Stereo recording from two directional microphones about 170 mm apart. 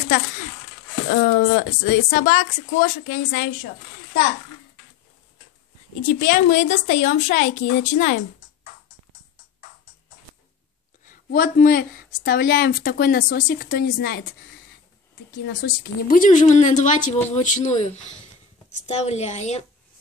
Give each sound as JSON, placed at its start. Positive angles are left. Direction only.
{"t": 1.0, "sound": "a woman's voice", "side_deg": 55}
{"t": 6.0, "sound": "a woman's voice", "side_deg": 50}
{"t": 11.1, "sound": "a woman's voice", "side_deg": 55}
{"t": 15.4, "sound": "a woman's voice", "side_deg": 75}
{"t": 18.9, "sound": "a woman's voice", "side_deg": 40}